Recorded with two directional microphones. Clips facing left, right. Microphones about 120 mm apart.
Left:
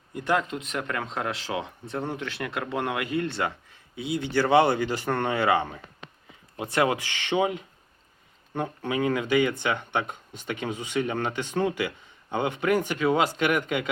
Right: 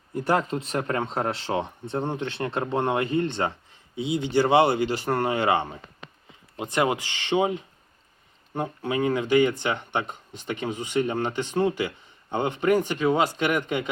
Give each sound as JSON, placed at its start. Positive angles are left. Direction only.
{"t": 0.1, "sound": "speech", "side_deg": -40}
{"t": 11.8, "sound": "a sound", "side_deg": -15}
{"t": 12.5, "sound": "speech", "side_deg": -20}